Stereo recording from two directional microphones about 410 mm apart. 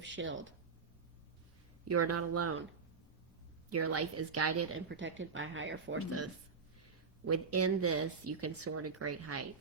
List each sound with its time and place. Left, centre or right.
0.1 s speech: right
1.9 s speech: right
3.7 s speech: right
7.3 s speech: right